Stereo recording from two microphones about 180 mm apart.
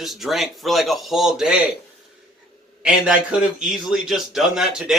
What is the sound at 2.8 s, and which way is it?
A man's voice, 5° right (ahead or behind).